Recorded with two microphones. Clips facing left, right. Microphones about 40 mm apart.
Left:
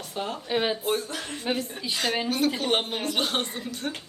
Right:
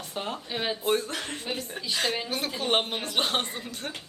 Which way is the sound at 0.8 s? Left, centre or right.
Right.